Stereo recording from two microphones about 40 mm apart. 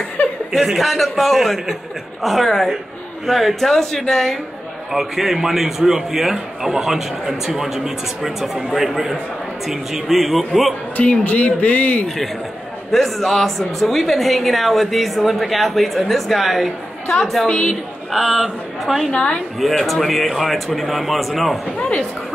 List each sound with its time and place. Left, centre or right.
0.5 s a woman's voice: centre
4.9 s a woman's voice: centre
11.0 s speech: left
12.9 s a woman's voice: centre
17.5 s a man's voice: left
18.1 s a woman's voice: centre
19.1 s speech: left
19.6 s a woman's voice: centre
21.7 s speech: left